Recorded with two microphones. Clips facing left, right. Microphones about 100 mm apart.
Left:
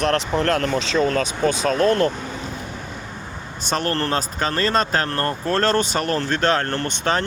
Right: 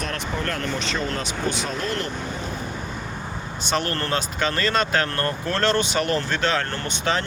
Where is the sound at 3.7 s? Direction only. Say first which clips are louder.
Left 3 dB; 40° left (ahead or behind).